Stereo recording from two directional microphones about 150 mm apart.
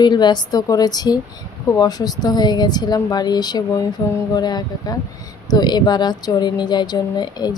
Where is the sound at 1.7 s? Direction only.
25° left (ahead or behind).